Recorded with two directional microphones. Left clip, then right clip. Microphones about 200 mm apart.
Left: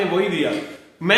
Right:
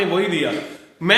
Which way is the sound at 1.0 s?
30° right (ahead or behind).